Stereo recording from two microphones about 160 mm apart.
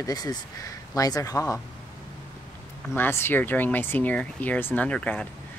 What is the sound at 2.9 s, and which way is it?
Speech, 15° left (ahead or behind).